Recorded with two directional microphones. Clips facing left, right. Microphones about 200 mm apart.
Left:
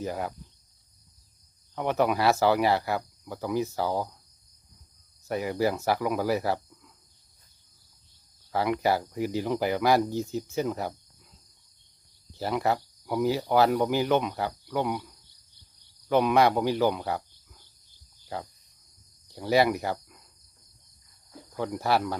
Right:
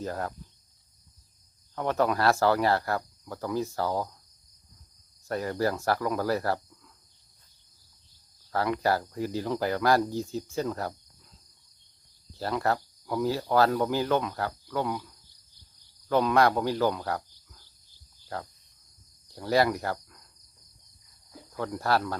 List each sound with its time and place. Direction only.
0.0 s speech: 10° left (ahead or behind)
1.7 s speech: 15° left (ahead or behind)
2.5 s speech: 15° left (ahead or behind)
2.8 s speech: 5° left (ahead or behind)
5.3 s speech: 10° left (ahead or behind)
8.5 s speech: 15° left (ahead or behind)
12.4 s speech: 15° left (ahead or behind)
19.3 s speech: 20° left (ahead or behind)
21.5 s speech: 15° left (ahead or behind)